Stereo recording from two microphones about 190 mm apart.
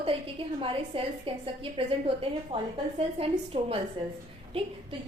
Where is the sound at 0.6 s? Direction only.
30° right (ahead or behind).